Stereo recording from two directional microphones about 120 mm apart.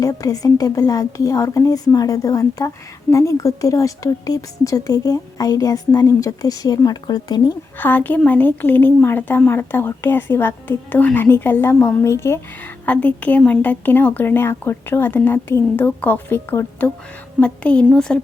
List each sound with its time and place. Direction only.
0.0 s a woman's voice: 30° left (ahead or behind)
7.8 s speech: 15° left (ahead or behind)
12.8 s speech: 15° left (ahead or behind)